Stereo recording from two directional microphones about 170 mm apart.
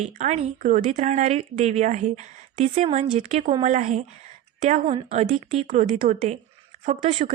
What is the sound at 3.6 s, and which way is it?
A woman's voice, 45° right (ahead or behind).